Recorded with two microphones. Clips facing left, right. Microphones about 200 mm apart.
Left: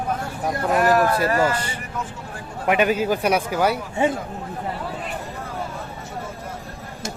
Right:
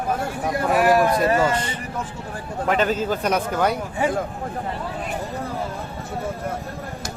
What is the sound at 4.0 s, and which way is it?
Speech, 25° left (ahead or behind).